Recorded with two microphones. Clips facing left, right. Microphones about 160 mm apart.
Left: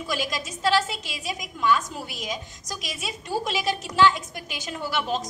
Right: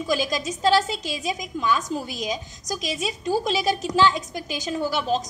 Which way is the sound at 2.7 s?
40° right (ahead or behind).